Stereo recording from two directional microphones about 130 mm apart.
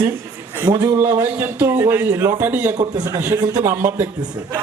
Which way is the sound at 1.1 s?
20° right (ahead or behind).